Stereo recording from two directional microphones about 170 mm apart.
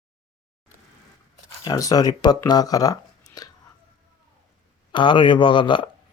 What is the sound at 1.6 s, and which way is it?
Speech, 20° left (ahead or behind).